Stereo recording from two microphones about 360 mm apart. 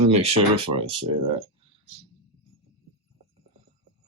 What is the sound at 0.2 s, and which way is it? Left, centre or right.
Speech, centre.